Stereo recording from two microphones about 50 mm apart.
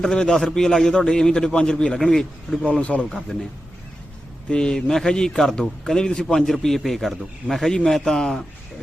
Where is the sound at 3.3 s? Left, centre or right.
Centre.